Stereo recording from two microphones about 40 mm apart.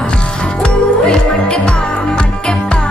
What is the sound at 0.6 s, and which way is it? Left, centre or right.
Music, left.